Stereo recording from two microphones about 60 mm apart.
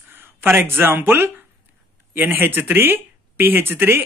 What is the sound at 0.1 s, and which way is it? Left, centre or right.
Speech, right.